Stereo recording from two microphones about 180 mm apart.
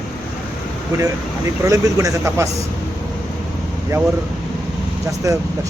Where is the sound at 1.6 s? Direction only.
20° right (ahead or behind).